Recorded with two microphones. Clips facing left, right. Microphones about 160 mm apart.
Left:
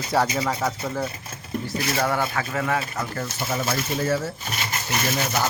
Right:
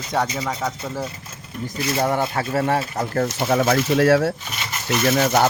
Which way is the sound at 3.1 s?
55° right (ahead or behind).